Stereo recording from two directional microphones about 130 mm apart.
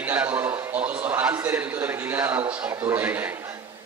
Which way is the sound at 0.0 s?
15° right (ahead or behind).